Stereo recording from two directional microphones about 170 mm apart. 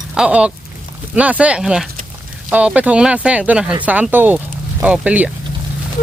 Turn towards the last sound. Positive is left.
turn(degrees=-10)  # may be behind; listen again after turning